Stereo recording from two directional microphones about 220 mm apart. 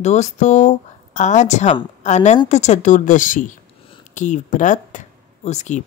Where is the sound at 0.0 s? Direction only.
30° left (ahead or behind).